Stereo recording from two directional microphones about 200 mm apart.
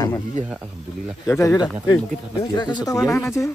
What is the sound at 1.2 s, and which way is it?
Speech, 15° left (ahead or behind).